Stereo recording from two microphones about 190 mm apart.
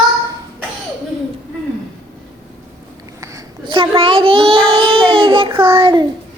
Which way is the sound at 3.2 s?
20° right (ahead or behind).